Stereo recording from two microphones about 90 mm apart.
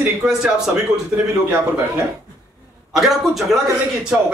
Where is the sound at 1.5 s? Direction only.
30° right (ahead or behind).